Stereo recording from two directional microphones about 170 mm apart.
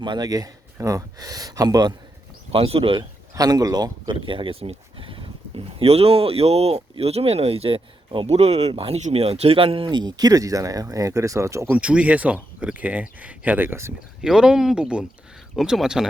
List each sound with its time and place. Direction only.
0.0 s speech: 25° right (ahead or behind)
3.0 s speech: 20° right (ahead or behind)
14.2 s speech: 5° right (ahead or behind)